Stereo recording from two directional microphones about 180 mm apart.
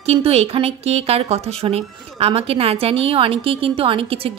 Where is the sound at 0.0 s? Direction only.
35° right (ahead or behind).